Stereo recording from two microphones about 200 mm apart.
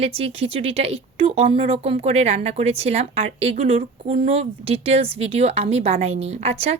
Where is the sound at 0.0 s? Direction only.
30° right (ahead or behind).